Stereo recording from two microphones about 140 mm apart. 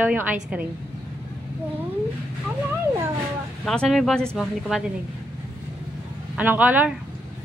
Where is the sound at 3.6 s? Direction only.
Centre (ahead or behind).